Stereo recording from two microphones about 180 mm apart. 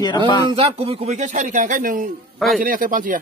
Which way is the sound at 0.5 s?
30° right (ahead or behind).